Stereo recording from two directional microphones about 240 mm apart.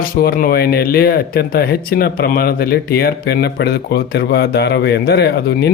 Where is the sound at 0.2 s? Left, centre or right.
Left.